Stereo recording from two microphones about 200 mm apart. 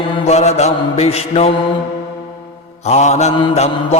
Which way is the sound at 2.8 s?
35° left (ahead or behind).